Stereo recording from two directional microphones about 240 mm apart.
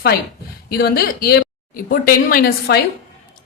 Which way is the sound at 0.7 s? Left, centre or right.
Left.